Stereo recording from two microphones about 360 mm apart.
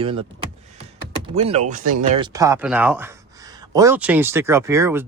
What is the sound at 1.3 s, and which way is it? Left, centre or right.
Speech, centre.